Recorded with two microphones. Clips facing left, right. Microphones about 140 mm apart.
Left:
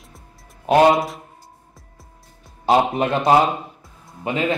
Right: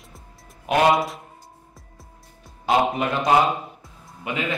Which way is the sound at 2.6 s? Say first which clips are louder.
Left 3 dB; 35° left (ahead or behind).